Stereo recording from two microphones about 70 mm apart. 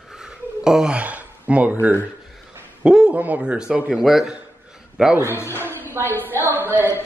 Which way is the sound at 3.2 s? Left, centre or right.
Centre.